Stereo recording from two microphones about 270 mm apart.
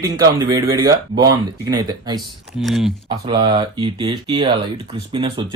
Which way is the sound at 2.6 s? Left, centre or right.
Centre.